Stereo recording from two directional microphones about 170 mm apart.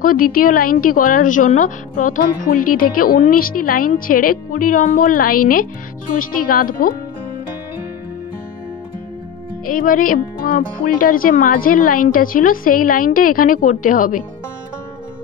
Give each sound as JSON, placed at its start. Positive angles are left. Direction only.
{"t": 0.0, "sound": "a woman's voice", "side_deg": 55}
{"t": 9.7, "sound": "a woman's voice", "side_deg": 55}